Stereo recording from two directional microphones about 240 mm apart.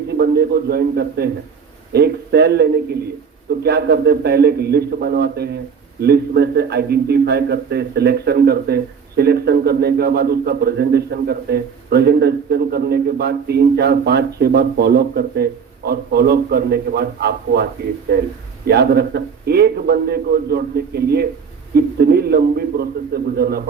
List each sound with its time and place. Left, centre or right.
0.2 s a man's voice: right